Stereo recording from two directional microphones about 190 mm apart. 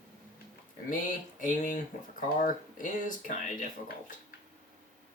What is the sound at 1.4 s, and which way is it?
Speech, 45° left (ahead or behind).